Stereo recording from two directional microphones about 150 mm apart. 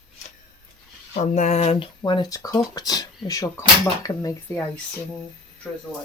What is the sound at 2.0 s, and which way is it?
Speech, 25° left (ahead or behind).